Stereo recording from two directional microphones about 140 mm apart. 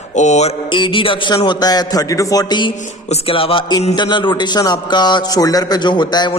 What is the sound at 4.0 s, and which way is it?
A man's voice, 35° left (ahead or behind).